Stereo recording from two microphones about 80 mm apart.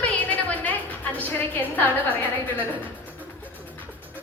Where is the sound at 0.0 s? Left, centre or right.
Centre.